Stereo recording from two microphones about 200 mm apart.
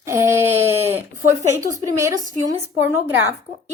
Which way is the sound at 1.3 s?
15° right (ahead or behind).